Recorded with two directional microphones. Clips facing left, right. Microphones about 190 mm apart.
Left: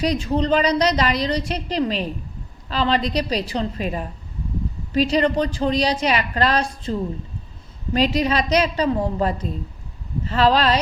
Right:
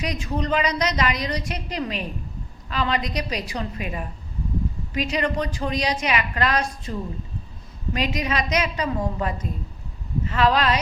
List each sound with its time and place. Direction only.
0.0 s a woman's voice: 30° left (ahead or behind)
7.9 s a woman's voice: 30° left (ahead or behind)